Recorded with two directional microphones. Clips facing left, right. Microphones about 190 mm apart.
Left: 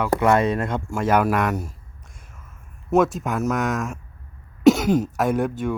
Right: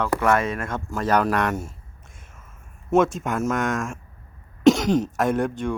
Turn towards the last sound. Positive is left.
turn(degrees=5)  # may be behind; listen again after turning